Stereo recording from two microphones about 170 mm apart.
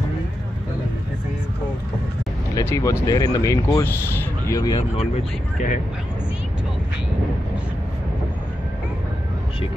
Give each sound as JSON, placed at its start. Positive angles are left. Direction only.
{"t": 2.5, "sound": "speech", "side_deg": 20}
{"t": 4.7, "sound": "speech", "side_deg": 40}